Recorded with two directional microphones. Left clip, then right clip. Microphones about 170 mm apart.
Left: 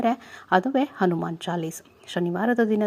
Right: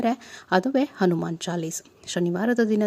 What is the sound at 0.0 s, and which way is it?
Speech, 30° right (ahead or behind).